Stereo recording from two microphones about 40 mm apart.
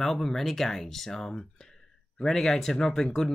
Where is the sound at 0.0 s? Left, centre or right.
Centre.